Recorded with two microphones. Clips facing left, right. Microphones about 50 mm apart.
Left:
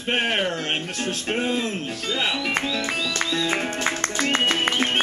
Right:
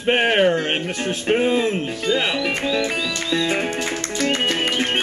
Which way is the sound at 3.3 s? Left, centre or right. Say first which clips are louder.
Right 5 dB; centre.